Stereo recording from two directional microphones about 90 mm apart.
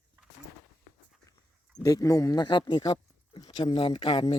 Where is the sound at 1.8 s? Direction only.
40° left (ahead or behind).